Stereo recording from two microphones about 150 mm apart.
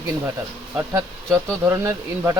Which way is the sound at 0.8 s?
20° right (ahead or behind).